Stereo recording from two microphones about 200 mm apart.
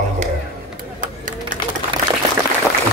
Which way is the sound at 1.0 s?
40° right (ahead or behind).